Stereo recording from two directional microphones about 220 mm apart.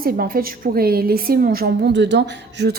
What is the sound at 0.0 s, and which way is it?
A woman's voice, 40° right (ahead or behind).